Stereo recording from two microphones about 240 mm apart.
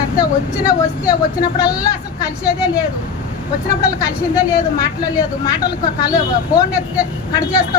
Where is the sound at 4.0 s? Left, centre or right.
Centre.